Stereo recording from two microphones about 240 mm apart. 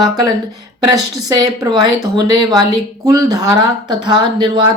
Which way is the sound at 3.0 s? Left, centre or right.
Centre.